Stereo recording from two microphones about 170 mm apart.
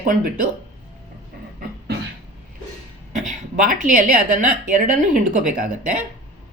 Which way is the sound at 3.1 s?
50° right (ahead or behind).